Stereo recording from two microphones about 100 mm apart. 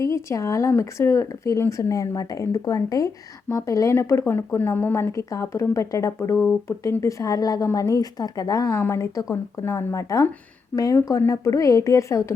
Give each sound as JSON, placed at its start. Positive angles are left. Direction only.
{"t": 0.0, "sound": "speech", "side_deg": 30}